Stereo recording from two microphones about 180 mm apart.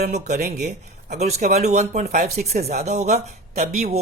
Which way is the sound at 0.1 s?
40° right (ahead or behind).